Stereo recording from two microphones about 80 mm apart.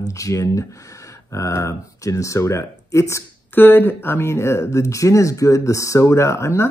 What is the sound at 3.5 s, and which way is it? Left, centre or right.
Speech, left.